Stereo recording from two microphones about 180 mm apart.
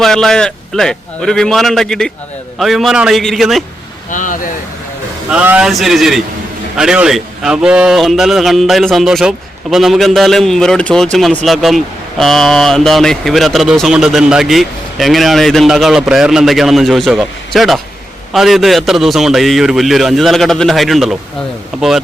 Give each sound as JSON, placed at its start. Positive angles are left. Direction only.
{"t": 0.0, "sound": "a man's voice", "side_deg": 0}
{"t": 4.1, "sound": "speech", "side_deg": 45}
{"t": 5.3, "sound": "a man's voice", "side_deg": -5}